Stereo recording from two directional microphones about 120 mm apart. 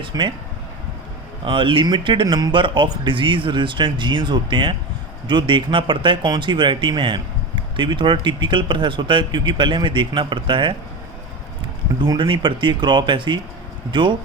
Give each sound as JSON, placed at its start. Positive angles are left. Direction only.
{"t": 0.0, "sound": "speech", "side_deg": -40}
{"t": 1.5, "sound": "speech", "side_deg": -45}
{"t": 11.9, "sound": "speech", "side_deg": -40}